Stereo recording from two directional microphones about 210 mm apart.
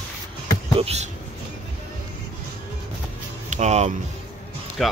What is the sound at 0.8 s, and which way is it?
Speech, 30° right (ahead or behind).